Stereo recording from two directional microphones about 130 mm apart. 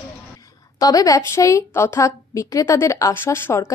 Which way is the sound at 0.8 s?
25° left (ahead or behind).